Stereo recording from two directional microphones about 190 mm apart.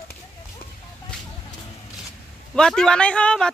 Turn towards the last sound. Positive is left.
turn(degrees=5)  # may be behind; listen again after turning